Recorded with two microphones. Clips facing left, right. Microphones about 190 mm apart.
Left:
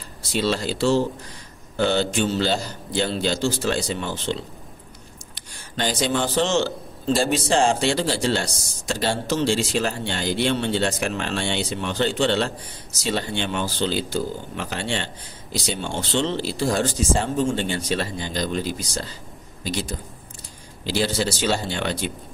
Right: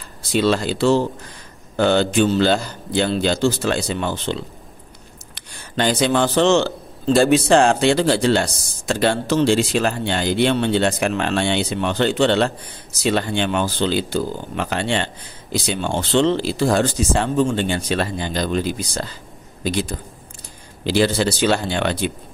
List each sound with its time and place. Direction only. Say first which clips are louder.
0.4 s speech: right 4 dB; 55° right (ahead or behind)
5.8 s speech: right 5 dB; 65° right (ahead or behind)
13.0 s speech: right 6 dB; 75° right (ahead or behind)